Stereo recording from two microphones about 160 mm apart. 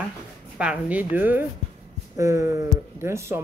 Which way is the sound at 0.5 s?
5° right (ahead or behind).